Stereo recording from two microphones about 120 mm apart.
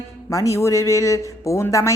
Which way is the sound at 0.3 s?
25° left (ahead or behind).